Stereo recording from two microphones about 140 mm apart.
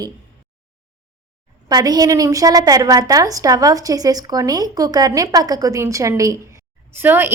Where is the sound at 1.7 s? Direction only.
25° right (ahead or behind).